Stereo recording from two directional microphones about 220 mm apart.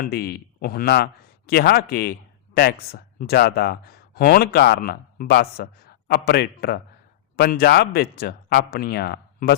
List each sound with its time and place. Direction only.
0.0 s speech: 45° left (ahead or behind)